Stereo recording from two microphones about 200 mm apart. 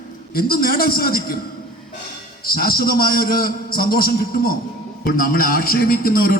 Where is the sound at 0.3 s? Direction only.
50° left (ahead or behind).